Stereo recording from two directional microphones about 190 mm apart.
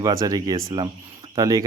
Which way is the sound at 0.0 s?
20° right (ahead or behind).